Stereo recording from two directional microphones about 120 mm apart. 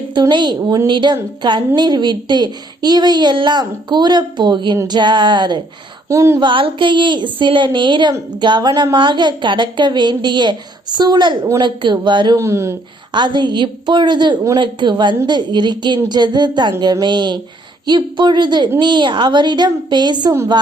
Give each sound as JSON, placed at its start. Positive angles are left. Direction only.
{"t": 0.1, "sound": "a woman's voice", "side_deg": -40}
{"t": 6.1, "sound": "speech", "side_deg": -25}
{"t": 6.4, "sound": "a woman's voice", "side_deg": -45}
{"t": 12.4, "sound": "speech", "side_deg": -25}
{"t": 13.1, "sound": "a woman's voice", "side_deg": -40}